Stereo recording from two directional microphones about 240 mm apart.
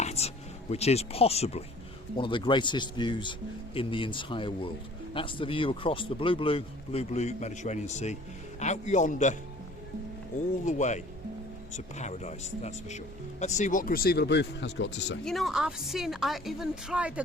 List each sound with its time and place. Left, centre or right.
0.0 s a sound: left
0.7 s speech: left
10.7 s speech: left
15.2 s speech: centre